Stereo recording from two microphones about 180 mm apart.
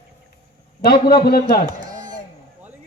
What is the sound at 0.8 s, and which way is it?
Speech, 55° left (ahead or behind).